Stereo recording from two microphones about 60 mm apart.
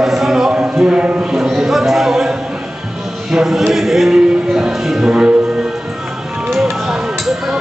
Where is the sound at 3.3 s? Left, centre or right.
Centre.